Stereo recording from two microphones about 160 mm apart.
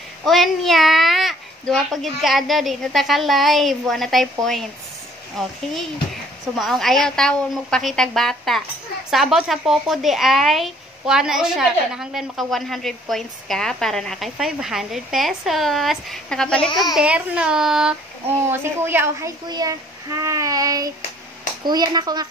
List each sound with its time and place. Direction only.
0.2 s speech: centre (ahead or behind)
6.6 s speech: centre (ahead or behind)
16.9 s speech: 5° right (ahead or behind)
18.5 s a child's voice: 15° right (ahead or behind)